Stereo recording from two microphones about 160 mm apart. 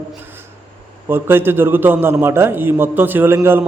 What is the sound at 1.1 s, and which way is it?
A man's voice, 15° right (ahead or behind).